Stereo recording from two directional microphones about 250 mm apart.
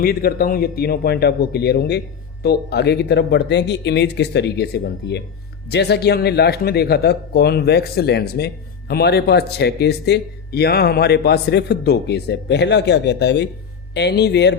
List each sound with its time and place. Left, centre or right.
0.0 s speech: left